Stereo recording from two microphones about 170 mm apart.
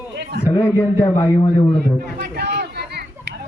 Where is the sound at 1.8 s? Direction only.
80° right.